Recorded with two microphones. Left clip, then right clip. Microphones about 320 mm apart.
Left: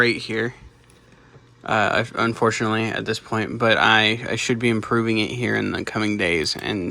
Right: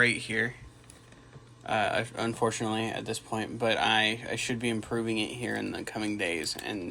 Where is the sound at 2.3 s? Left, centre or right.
Left.